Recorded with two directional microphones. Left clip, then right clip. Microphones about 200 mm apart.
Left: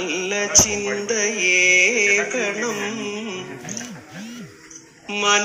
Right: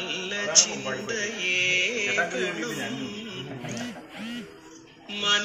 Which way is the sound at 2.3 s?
20° left (ahead or behind).